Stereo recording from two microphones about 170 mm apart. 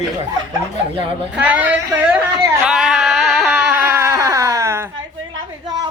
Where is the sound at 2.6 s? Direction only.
5° right (ahead or behind).